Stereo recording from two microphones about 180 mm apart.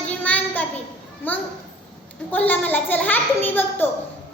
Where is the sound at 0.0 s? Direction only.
10° left (ahead or behind).